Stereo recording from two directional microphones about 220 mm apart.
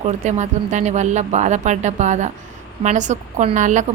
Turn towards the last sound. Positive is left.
turn(degrees=-35)  # may be behind; listen again after turning